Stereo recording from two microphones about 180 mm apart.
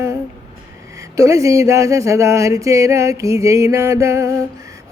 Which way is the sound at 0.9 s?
20° right (ahead or behind).